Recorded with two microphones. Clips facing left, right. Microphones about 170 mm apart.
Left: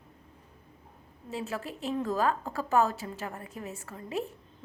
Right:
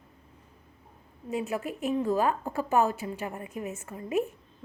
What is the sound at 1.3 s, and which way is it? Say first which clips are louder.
A woman's voice: right 4 dB; 15° right (ahead or behind).